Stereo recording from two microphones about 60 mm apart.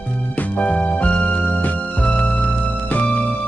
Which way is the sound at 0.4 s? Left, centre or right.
Left.